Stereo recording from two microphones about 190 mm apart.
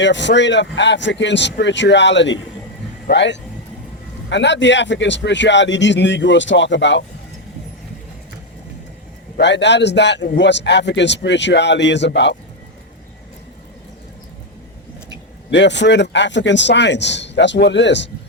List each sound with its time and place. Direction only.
0.0 s speech: 70° left (ahead or behind)
9.4 s speech: 65° left (ahead or behind)
15.4 s speech: 65° left (ahead or behind)